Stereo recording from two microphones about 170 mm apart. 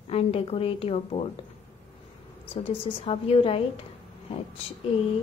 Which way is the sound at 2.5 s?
35° left (ahead or behind).